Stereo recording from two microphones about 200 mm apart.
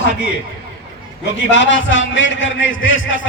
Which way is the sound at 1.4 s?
65° left (ahead or behind).